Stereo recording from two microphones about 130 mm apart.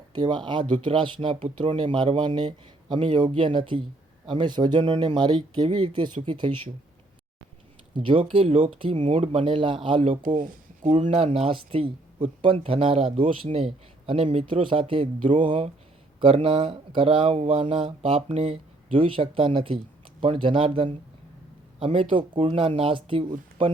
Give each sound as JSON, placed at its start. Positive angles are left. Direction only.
{"t": 0.1, "sound": "speech", "side_deg": -35}
{"t": 7.9, "sound": "speech", "side_deg": -40}